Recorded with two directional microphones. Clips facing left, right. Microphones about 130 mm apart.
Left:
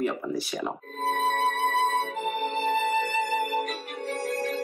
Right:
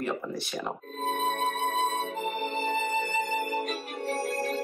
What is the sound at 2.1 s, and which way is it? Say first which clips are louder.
Music: left 2 dB; 40° right (ahead or behind).